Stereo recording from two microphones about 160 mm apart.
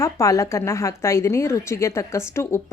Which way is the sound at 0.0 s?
20° left (ahead or behind).